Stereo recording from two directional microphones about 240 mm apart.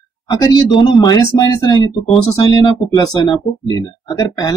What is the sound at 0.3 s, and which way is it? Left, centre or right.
Speech, centre.